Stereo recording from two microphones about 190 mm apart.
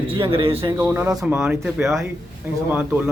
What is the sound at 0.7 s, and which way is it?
Speech, 10° right (ahead or behind).